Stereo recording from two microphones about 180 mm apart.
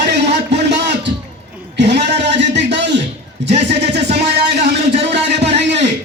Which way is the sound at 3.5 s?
40° right (ahead or behind).